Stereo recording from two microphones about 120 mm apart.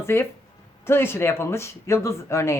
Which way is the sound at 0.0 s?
20° left (ahead or behind).